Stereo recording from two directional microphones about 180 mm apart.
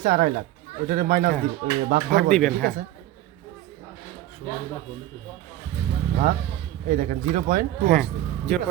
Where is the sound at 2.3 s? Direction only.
5° left (ahead or behind).